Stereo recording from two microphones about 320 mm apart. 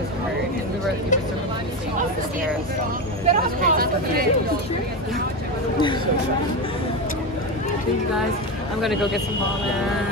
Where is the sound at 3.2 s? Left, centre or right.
Right.